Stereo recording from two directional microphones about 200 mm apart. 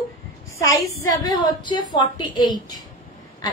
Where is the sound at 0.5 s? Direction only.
15° left (ahead or behind).